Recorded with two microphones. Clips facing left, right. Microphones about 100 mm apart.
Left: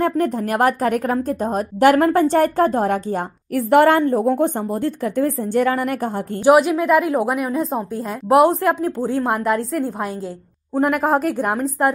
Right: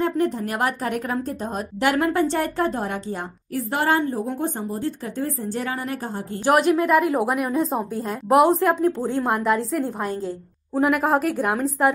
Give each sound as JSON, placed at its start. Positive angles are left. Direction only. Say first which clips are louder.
{"t": 0.0, "sound": "a woman's voice", "louder": "left 3 dB", "side_deg": 50}
{"t": 6.5, "sound": "a woman's voice", "louder": "left 3 dB", "side_deg": 0}